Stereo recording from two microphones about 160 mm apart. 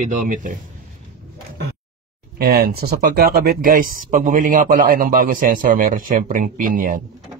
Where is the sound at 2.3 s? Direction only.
75° right (ahead or behind).